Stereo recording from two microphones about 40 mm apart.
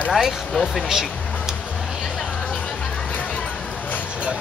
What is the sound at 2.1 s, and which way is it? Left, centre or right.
Music, centre.